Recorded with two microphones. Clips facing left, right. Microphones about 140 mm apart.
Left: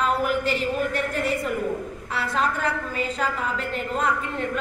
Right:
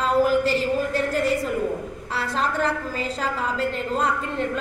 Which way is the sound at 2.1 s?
30° right (ahead or behind).